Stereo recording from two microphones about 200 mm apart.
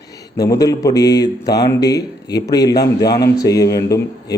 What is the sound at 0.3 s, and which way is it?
Speech, 15° left (ahead or behind).